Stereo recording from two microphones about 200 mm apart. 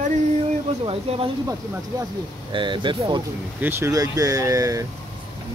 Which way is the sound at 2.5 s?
25° right (ahead or behind).